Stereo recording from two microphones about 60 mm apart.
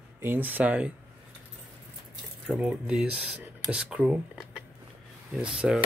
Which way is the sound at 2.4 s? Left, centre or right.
Centre.